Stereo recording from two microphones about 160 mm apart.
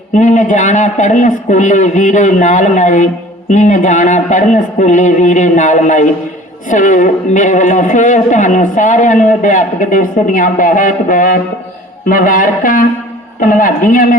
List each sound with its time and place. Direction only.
0.1 s a man's voice: 50° left (ahead or behind)